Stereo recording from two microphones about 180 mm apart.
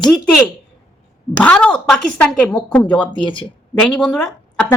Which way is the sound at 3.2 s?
25° left (ahead or behind).